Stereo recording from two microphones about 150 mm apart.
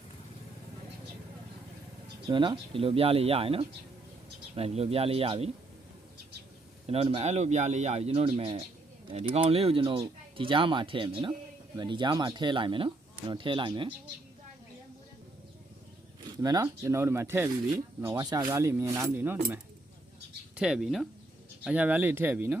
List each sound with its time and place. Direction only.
2.3 s speech: 35° right (ahead or behind)
6.8 s speech: 45° right (ahead or behind)
16.4 s speech: 25° right (ahead or behind)
20.6 s speech: 5° right (ahead or behind)